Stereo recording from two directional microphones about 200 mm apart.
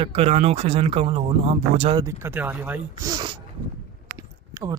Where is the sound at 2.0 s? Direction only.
15° right (ahead or behind).